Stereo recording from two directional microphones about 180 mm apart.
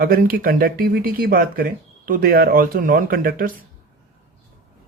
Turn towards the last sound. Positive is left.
turn(degrees=-50)  # may be behind; listen again after turning